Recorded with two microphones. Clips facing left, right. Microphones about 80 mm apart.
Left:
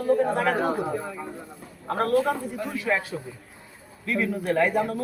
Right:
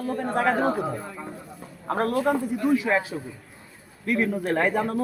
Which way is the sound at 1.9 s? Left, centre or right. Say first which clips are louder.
Even; right.